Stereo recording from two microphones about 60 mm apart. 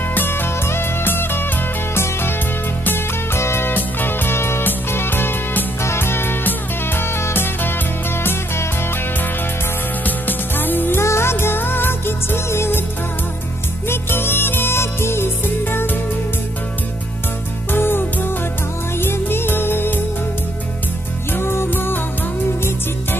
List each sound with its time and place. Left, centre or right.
0.1 s music: left
3.3 s music: left
3.7 s music: left
5.8 s music: left
10.0 s music: left
11.0 s music: left
13.8 s music: left
17.6 s music: left
21.3 s music: left